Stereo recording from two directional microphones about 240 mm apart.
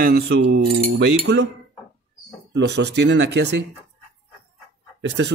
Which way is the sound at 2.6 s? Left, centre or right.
Right.